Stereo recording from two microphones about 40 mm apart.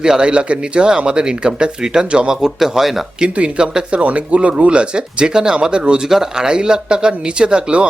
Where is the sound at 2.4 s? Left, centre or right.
Centre.